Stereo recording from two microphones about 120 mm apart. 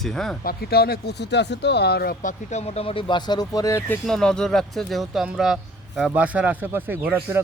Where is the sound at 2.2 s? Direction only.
70° left (ahead or behind); by 4.0 s 20° left (ahead or behind).